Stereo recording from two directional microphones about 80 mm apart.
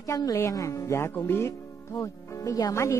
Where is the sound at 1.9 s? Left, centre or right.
Left.